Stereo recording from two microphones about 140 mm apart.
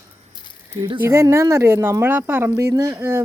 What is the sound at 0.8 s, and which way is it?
Speech, 35° right (ahead or behind).